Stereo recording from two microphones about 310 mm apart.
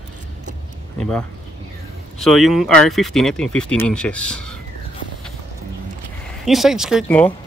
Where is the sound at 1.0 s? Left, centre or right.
Centre.